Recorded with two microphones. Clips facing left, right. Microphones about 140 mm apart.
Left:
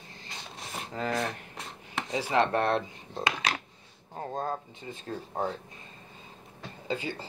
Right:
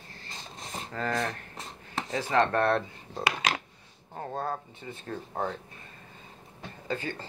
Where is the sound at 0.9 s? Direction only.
20° left (ahead or behind).